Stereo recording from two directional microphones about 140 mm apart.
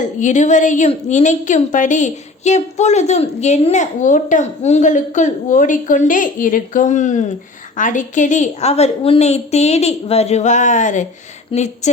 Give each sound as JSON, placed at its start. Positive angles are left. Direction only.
{"t": 0.0, "sound": "a woman's voice", "side_deg": 60}